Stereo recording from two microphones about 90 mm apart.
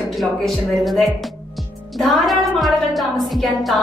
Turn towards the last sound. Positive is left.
turn(degrees=0)  # may be behind; listen again after turning